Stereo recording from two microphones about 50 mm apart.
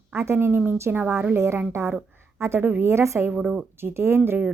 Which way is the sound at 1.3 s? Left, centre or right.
Right.